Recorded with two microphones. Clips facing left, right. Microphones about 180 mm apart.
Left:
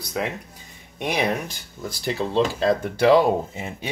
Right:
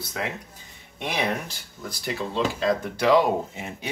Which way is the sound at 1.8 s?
30° left (ahead or behind).